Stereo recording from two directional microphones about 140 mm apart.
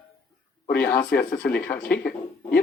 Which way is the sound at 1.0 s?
85° left.